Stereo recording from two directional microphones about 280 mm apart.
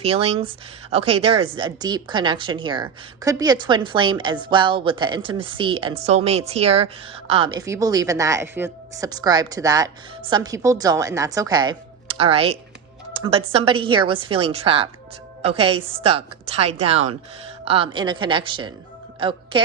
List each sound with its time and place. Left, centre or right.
0.0 s a woman's voice: right